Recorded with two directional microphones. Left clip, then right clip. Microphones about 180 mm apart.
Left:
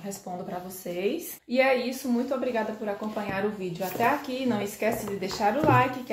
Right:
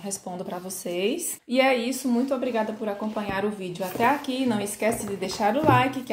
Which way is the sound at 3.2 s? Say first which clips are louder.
Even; 30° right (ahead or behind).